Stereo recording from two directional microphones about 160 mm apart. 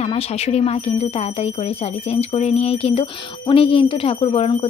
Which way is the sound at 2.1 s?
40° left (ahead or behind).